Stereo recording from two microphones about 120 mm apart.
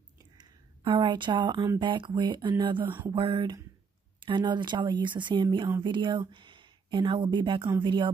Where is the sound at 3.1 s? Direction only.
45° right (ahead or behind).